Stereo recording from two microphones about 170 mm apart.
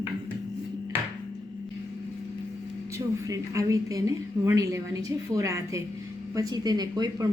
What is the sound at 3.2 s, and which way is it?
Speech, 20° right (ahead or behind).